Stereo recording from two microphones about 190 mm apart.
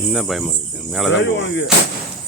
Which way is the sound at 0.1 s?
Centre (ahead or behind).